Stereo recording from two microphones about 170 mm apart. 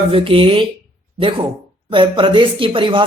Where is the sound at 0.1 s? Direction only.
30° right (ahead or behind).